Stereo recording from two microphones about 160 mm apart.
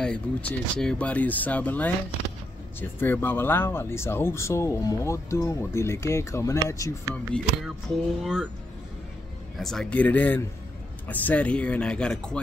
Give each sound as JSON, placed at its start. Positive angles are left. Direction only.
{"t": 0.0, "sound": "speech", "side_deg": 5}
{"t": 7.3, "sound": "speech", "side_deg": 5}
{"t": 8.2, "sound": "speech", "side_deg": -5}
{"t": 9.6, "sound": "speech", "side_deg": 0}